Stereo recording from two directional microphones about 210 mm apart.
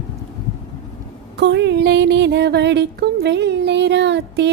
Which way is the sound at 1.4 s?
55° right (ahead or behind).